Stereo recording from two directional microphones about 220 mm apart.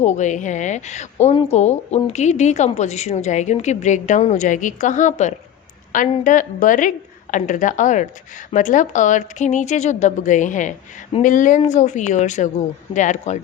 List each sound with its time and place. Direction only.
0.0 s a woman's voice: 30° left (ahead or behind)